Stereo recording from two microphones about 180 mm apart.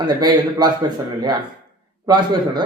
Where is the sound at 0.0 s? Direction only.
25° right (ahead or behind).